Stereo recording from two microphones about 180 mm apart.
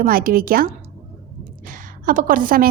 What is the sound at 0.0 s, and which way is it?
Speech, 55° right (ahead or behind).